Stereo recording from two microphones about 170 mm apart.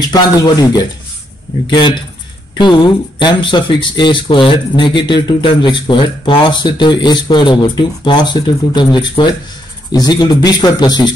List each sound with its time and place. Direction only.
0.0 s speech: 25° left (ahead or behind)